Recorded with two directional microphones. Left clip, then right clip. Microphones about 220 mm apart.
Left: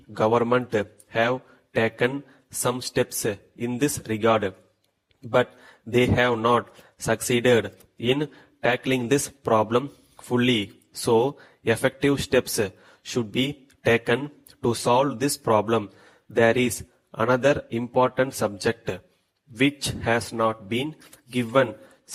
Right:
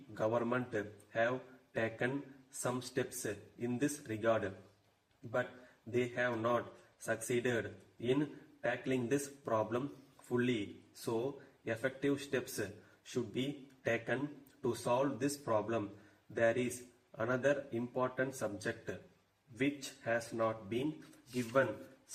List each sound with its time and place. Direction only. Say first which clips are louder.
0.1 s a man's voice: left 14 dB; 40° left (ahead or behind)
5.9 s a man's voice: left 15 dB; 40° left (ahead or behind)